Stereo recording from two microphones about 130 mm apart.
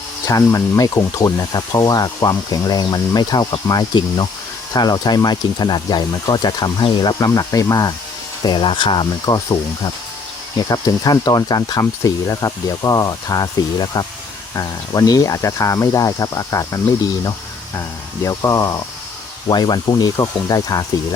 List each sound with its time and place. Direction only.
0.3 s speech: 25° left (ahead or behind)